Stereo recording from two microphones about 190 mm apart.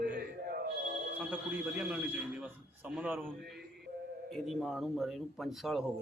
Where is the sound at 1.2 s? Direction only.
10° right (ahead or behind).